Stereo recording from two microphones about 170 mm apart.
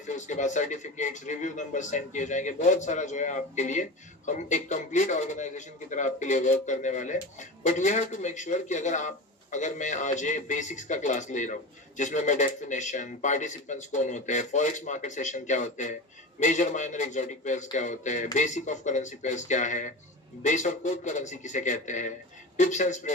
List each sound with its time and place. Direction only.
0.3 s speech: 45° left (ahead or behind)